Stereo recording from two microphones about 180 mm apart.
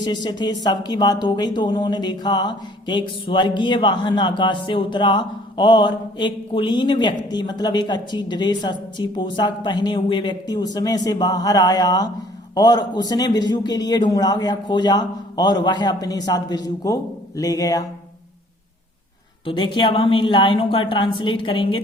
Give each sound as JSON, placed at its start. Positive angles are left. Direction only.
{"t": 0.0, "sound": "speech", "side_deg": 25}
{"t": 19.5, "sound": "speech", "side_deg": 25}